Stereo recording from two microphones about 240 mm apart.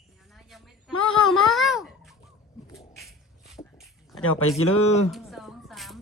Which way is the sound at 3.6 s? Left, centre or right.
Left.